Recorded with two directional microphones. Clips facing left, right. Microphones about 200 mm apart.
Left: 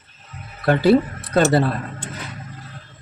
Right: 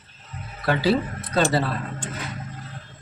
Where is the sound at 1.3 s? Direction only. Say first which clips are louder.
Left 5 dB; 50° left (ahead or behind).